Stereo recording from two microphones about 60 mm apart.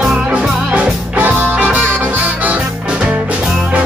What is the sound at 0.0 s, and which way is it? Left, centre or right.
Music, centre.